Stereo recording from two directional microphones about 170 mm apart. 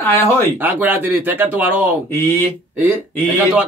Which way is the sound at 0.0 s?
15° left (ahead or behind).